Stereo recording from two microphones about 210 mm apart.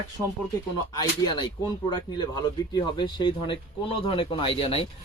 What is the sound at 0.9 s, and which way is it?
Speech, 20° left (ahead or behind).